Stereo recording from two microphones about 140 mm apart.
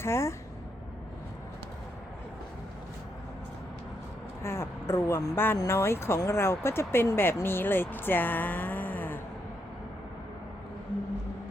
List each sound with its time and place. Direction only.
0.0 s speech: 20° left (ahead or behind)
4.4 s speech: 20° left (ahead or behind)